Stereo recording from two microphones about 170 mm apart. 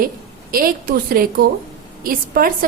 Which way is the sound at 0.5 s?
60° right (ahead or behind).